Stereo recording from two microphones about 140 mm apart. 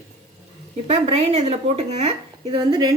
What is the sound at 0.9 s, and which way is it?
A woman's voice, 45° right (ahead or behind).